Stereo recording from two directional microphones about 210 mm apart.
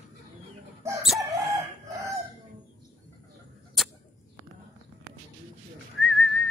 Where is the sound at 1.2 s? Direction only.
15° right (ahead or behind).